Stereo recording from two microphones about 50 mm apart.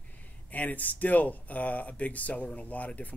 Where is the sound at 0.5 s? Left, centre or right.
Left.